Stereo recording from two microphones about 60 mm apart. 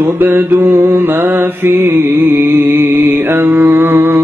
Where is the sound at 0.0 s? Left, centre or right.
Right.